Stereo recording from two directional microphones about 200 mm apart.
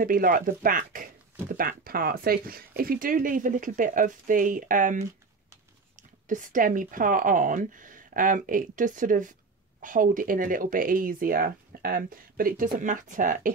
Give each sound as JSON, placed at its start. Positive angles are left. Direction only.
{"t": 0.0, "sound": "speech", "side_deg": -45}